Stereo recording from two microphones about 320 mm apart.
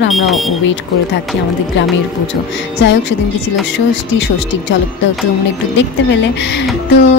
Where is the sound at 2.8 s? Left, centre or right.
Left.